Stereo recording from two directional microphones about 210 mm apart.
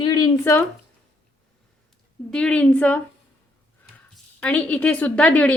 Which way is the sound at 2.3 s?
5° left (ahead or behind).